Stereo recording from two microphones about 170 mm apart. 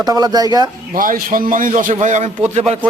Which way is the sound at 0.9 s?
55° right (ahead or behind).